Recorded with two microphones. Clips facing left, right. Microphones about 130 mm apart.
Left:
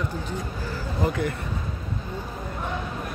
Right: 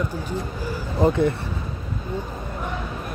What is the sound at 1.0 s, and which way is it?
Speech, 25° right (ahead or behind).